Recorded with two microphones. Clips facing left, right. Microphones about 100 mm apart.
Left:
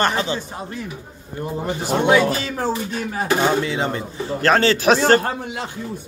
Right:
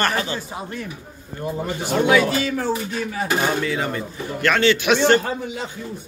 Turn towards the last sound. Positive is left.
turn(degrees=40)  # may be behind; listen again after turning